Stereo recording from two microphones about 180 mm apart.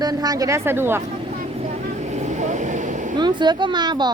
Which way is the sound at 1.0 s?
35° right (ahead or behind).